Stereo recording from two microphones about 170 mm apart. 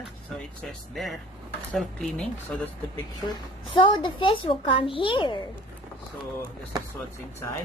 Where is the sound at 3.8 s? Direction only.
30° left (ahead or behind).